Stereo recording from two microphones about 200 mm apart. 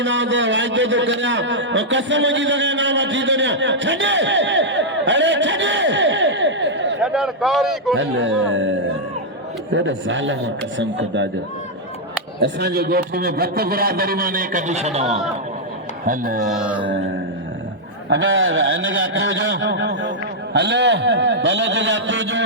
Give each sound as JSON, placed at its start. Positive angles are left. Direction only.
{"t": 0.0, "sound": "a man's voice", "side_deg": -65}
{"t": 7.0, "sound": "a man's voice", "side_deg": -5}
{"t": 7.9, "sound": "a man's voice", "side_deg": -70}
{"t": 12.4, "sound": "a man's voice", "side_deg": -55}
{"t": 16.0, "sound": "a man's voice", "side_deg": -45}
{"t": 16.5, "sound": "a man's voice", "side_deg": -5}
{"t": 16.8, "sound": "a man's voice", "side_deg": -65}
{"t": 18.1, "sound": "a man's voice", "side_deg": -70}